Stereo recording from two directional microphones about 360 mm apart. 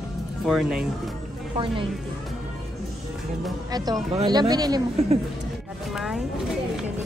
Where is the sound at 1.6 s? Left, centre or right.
Centre.